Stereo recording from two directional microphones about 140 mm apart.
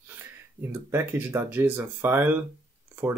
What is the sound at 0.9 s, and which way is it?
Speech, 15° right (ahead or behind).